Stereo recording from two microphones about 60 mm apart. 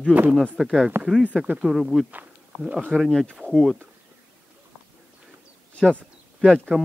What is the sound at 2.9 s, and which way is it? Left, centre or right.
Speech, centre.